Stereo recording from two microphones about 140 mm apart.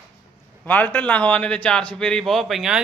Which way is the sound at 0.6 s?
10° left (ahead or behind).